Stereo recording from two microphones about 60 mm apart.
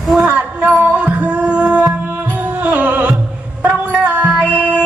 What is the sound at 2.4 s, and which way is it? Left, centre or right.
Music, right.